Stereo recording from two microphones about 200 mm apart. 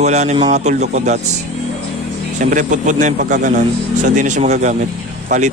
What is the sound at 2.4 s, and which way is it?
Speech, 40° right (ahead or behind).